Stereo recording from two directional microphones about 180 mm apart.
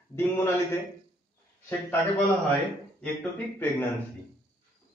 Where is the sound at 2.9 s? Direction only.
10° left (ahead or behind).